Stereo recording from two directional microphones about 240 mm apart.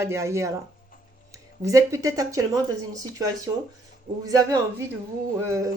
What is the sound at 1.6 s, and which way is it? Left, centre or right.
Speech, centre.